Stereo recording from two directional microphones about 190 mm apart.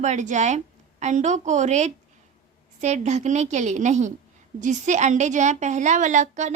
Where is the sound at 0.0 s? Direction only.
40° right (ahead or behind).